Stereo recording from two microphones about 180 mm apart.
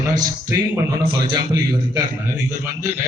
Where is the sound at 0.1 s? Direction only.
20° right (ahead or behind).